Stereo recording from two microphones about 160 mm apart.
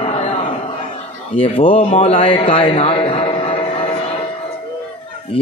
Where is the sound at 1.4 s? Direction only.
35° left (ahead or behind).